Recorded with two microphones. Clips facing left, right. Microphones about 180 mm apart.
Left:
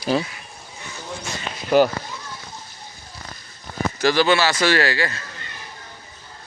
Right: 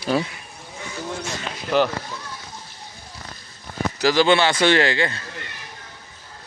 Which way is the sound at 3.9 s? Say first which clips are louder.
Right 1 dB; 15° right (ahead or behind).